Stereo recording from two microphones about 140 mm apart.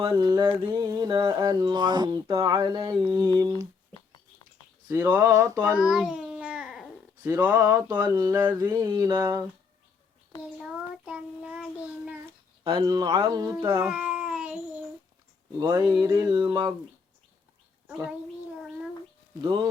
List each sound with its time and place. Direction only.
0.1 s speech: 30° right (ahead or behind)
0.5 s a sound: 25° right (ahead or behind)
2.2 s speech: 20° right (ahead or behind)
3.9 s rodents: 25° left (ahead or behind)
4.9 s speech: 20° right (ahead or behind)
5.5 s babbling: 10° right (ahead or behind)
7.3 s child singing: 15° right (ahead or behind)
7.6 s speech: 25° right (ahead or behind)
8.3 s child singing: 15° right (ahead or behind)
8.8 s a sound: 30° right (ahead or behind)
10.6 s child singing: 5° right (ahead or behind)
12.6 s speech: 30° right (ahead or behind); by 14.6 s 5° right (ahead or behind)
15.5 s speech: 25° right (ahead or behind)